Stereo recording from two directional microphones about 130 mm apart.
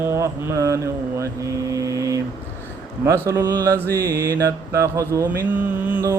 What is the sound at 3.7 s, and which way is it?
Speech, 15° left (ahead or behind).